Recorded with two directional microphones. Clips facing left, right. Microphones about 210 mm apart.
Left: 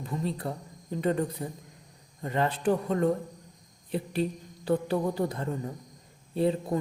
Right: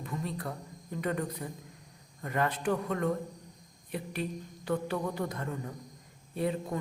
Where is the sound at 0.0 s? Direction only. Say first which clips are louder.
Left 4 dB; 30° left (ahead or behind).